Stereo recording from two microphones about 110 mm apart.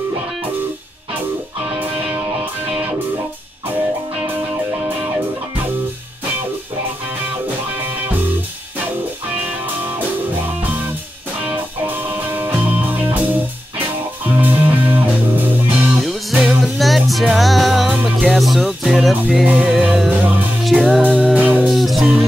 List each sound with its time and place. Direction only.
11.4 s music: 15° right (ahead or behind)
14.4 s music: 15° right (ahead or behind)
16.0 s music: centre (ahead or behind)
21.4 s music: 15° right (ahead or behind)
21.6 s music: centre (ahead or behind)